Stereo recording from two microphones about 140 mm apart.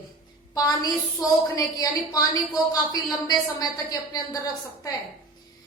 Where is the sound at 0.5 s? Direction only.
25° left (ahead or behind).